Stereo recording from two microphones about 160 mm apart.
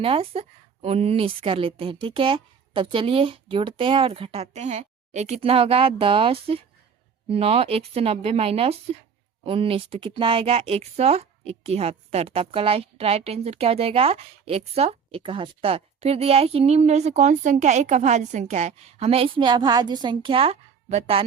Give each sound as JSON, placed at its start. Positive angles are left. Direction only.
{"t": 0.0, "sound": "speech", "side_deg": -35}